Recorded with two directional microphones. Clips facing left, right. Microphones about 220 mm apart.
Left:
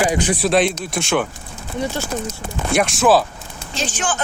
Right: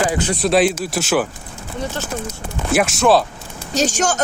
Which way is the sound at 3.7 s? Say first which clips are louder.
Right 6 dB; 45° right (ahead or behind).